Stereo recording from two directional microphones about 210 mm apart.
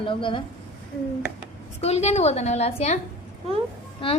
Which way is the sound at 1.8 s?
30° left (ahead or behind).